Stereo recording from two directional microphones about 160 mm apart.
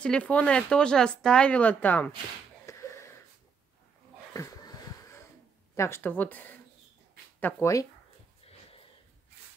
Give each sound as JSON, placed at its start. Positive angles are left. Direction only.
{"t": 0.0, "sound": "speech", "side_deg": 5}
{"t": 2.6, "sound": "wheeze", "side_deg": 20}
{"t": 4.3, "sound": "a sound", "side_deg": 20}
{"t": 5.8, "sound": "speech", "side_deg": 15}